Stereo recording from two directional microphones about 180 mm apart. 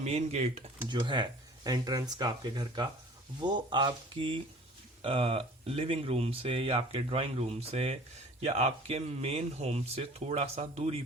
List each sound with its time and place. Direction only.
0.0 s speech: 35° right (ahead or behind)